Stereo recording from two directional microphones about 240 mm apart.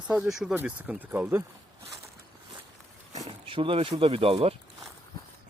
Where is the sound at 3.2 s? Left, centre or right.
Right.